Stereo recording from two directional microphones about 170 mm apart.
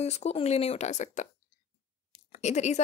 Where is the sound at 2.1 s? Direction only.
45° left (ahead or behind).